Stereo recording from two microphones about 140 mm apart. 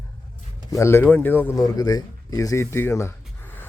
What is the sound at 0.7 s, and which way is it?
A man's voice, 20° left (ahead or behind).